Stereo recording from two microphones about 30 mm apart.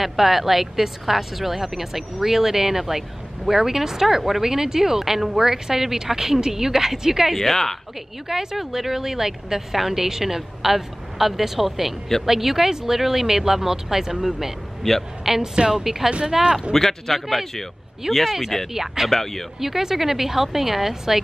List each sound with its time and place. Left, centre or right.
0.0 s speech: centre
7.3 s speech: centre
8.3 s speech: centre
14.8 s a man's voice: centre
15.2 s speech: centre
16.7 s speech: centre
18.0 s speech: centre
19.0 s speech: centre
19.6 s speech: centre